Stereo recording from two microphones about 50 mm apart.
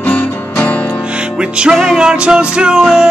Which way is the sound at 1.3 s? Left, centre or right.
Centre.